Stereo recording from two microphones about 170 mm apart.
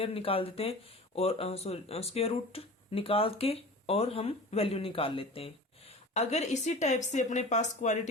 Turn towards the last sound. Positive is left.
turn(degrees=45)  # may be behind; listen again after turning